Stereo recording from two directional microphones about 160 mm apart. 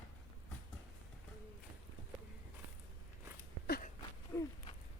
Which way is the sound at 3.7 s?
65° left (ahead or behind).